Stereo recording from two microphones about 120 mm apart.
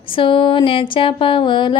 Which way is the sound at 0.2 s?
45° left (ahead or behind).